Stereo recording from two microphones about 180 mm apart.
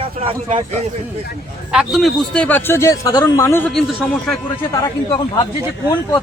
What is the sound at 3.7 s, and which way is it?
Speech, 5° left (ahead or behind).